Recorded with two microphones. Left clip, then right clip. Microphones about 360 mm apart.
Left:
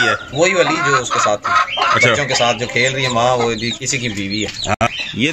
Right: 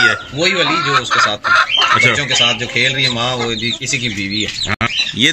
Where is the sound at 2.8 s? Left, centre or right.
Left.